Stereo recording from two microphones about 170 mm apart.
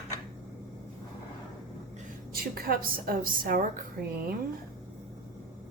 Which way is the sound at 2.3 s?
60° right (ahead or behind).